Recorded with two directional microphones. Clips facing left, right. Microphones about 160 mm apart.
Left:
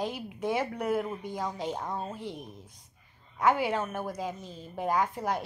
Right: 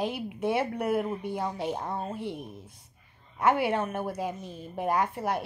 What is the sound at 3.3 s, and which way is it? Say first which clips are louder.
A woman's voice: right 1 dB; 15° right (ahead or behind).